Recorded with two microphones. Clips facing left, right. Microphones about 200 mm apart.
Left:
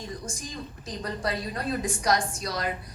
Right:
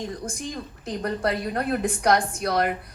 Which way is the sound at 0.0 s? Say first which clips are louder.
Right 6 dB; 60° right (ahead or behind).